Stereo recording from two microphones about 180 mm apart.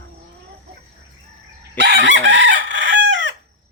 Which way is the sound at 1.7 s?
80° right.